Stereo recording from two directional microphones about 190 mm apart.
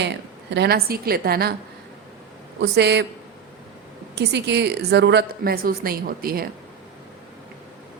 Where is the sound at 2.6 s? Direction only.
65° right (ahead or behind).